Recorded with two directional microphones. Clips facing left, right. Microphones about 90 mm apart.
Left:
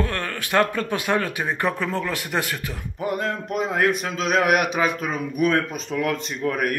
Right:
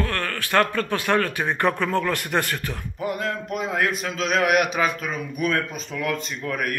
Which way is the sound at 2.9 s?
35° left (ahead or behind).